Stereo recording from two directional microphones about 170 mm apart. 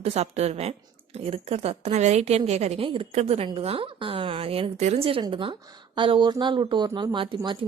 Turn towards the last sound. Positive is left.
turn(degrees=-30)  # may be behind; listen again after turning